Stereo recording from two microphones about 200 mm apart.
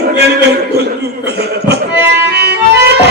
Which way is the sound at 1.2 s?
55° right (ahead or behind).